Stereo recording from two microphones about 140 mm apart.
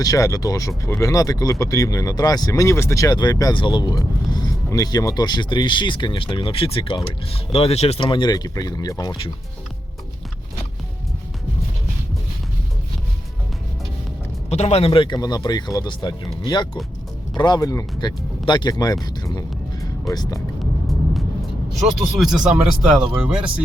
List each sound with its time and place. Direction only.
0.0 s speech: 25° left (ahead or behind)
14.5 s speech: 50° left (ahead or behind); by 18.9 s 30° left (ahead or behind)
19.2 s music: 25° left (ahead or behind)
20.8 s vehicle: centre (ahead or behind)
22.0 s speech: centre (ahead or behind)